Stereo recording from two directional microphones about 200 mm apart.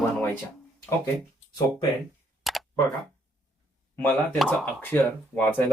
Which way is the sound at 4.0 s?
10° left (ahead or behind).